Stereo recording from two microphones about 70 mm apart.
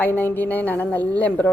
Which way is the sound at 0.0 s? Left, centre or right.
Left.